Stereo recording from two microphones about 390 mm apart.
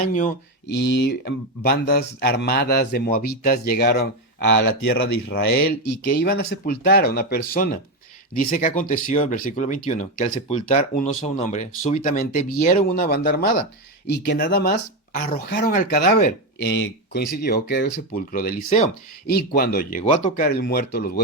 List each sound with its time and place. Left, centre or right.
0.1 s speech: centre